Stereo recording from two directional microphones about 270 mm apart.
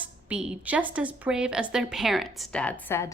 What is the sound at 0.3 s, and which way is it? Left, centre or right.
A woman's voice, centre.